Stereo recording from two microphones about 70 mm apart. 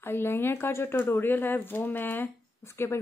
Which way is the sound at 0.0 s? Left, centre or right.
Left.